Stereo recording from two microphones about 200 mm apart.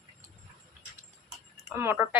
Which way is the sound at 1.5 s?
10° right (ahead or behind).